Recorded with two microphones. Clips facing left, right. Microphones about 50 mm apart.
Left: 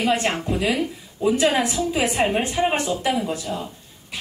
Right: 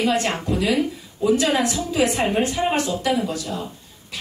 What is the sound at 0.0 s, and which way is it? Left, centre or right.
Speech, left.